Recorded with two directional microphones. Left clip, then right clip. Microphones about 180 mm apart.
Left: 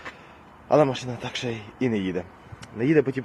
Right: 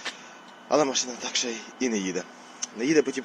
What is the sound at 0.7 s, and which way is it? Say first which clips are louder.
Speech: left 3 dB; 25° left (ahead or behind).